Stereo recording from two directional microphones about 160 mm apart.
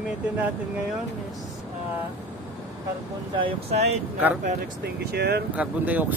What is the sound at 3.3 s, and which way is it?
Speech, 35° right (ahead or behind).